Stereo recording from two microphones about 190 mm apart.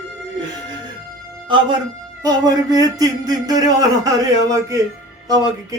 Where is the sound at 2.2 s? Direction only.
20° right (ahead or behind).